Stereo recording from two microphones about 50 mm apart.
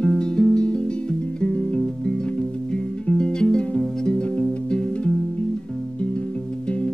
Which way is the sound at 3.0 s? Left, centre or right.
Centre.